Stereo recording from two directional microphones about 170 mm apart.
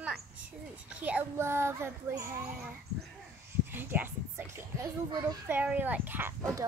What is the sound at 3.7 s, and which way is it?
A woman's voice, 10° right (ahead or behind).